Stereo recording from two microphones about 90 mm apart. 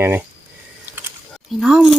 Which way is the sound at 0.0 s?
25° right (ahead or behind).